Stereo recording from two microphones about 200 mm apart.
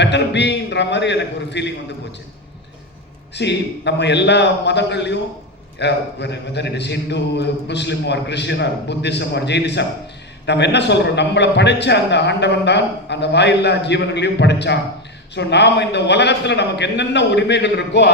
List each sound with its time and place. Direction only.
0.0 s a man's voice: 60° left (ahead or behind)
3.3 s a man's voice: 60° left (ahead or behind)